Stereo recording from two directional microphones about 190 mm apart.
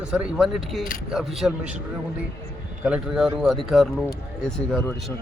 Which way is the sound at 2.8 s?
5° right (ahead or behind).